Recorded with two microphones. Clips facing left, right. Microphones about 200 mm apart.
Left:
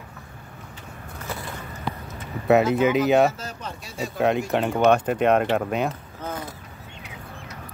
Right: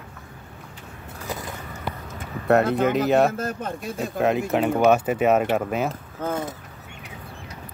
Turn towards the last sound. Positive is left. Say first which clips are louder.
# right 5 dB
turn(degrees=-50)  # may be behind; listen again after turning